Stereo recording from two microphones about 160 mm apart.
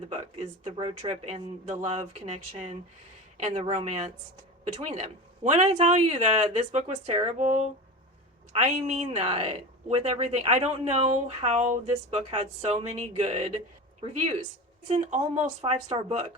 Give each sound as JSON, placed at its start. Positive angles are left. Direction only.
{"t": 0.1, "sound": "speech", "side_deg": -40}
{"t": 8.6, "sound": "speech", "side_deg": -45}
{"t": 14.8, "sound": "speech", "side_deg": -45}